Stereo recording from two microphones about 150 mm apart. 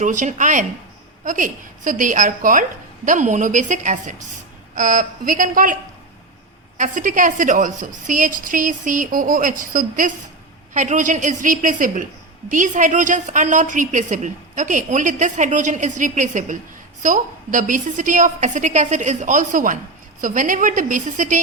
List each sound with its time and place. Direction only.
0.0 s a woman's voice: 55° right (ahead or behind)
6.7 s a woman's voice: 60° right (ahead or behind)